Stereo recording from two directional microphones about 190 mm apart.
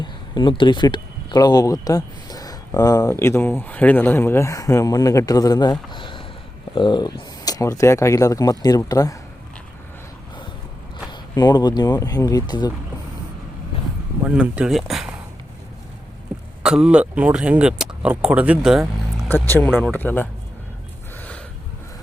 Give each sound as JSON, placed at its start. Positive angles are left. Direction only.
{"t": 0.0, "sound": "speech", "side_deg": 25}
{"t": 11.1, "sound": "speech", "side_deg": 20}
{"t": 14.3, "sound": "speech", "side_deg": -5}
{"t": 16.6, "sound": "speech", "side_deg": -5}
{"t": 19.3, "sound": "speech", "side_deg": 10}
{"t": 21.2, "sound": "gasp", "side_deg": 5}